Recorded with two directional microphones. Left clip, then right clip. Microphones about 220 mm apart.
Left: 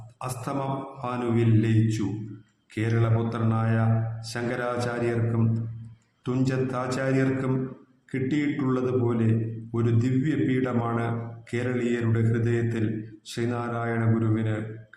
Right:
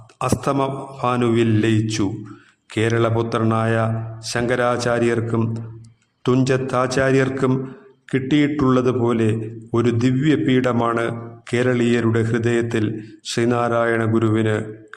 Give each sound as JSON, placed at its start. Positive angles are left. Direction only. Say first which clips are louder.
{"t": 0.2, "sound": "a man's voice", "louder": "right 11 dB", "side_deg": -45}